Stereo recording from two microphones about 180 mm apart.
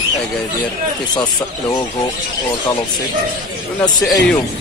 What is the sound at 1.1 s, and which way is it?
Speech, 25° left (ahead or behind).